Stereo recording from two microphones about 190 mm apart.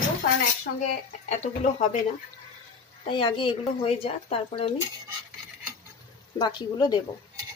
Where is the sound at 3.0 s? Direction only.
25° left (ahead or behind).